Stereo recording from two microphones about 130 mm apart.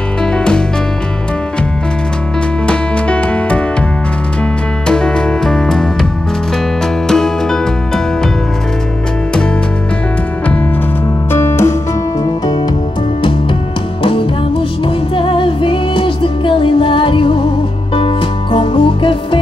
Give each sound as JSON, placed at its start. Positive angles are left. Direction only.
{"t": 0.2, "sound": "music", "side_deg": 5}
{"t": 2.6, "sound": "music", "side_deg": 10}
{"t": 4.8, "sound": "music", "side_deg": 5}
{"t": 7.1, "sound": "music", "side_deg": 5}
{"t": 11.3, "sound": "music", "side_deg": 20}
{"t": 14.9, "sound": "music", "side_deg": 40}